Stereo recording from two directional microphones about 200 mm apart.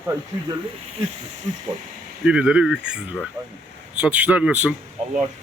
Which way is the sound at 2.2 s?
5° right (ahead or behind).